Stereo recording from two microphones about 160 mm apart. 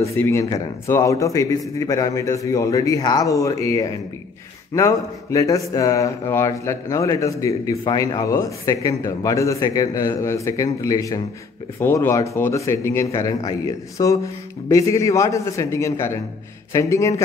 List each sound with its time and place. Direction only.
0.0 s speech: 20° left (ahead or behind)